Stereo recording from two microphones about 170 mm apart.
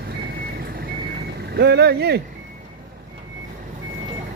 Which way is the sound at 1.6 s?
75° right (ahead or behind).